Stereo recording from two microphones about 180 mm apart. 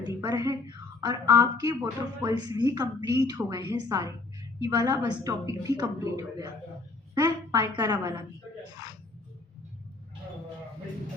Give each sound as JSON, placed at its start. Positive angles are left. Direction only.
{"t": 0.0, "sound": "a woman's voice", "side_deg": -20}